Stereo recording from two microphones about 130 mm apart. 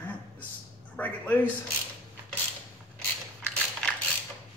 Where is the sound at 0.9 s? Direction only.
15° left (ahead or behind).